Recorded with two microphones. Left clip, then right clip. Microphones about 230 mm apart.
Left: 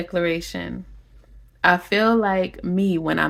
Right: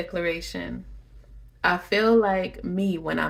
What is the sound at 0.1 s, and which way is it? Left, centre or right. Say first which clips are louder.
Speech: left 9 dB; left.